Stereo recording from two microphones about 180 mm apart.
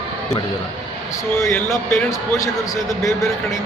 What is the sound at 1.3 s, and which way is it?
A man's voice, 15° left (ahead or behind).